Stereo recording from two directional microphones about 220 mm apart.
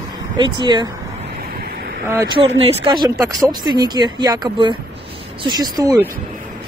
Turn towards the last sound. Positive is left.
turn(degrees=-15)  # may be behind; listen again after turning